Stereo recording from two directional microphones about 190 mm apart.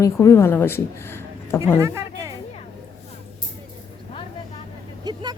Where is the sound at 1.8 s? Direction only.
15° right (ahead or behind).